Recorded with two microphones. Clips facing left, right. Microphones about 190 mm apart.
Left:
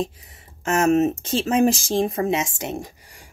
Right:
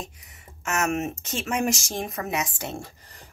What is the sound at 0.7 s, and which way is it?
Speech, 30° left (ahead or behind).